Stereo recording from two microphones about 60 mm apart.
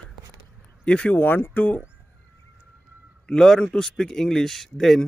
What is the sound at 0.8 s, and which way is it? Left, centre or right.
Speech, centre.